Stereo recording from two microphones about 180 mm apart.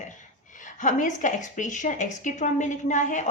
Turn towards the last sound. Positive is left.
turn(degrees=45)  # may be behind; listen again after turning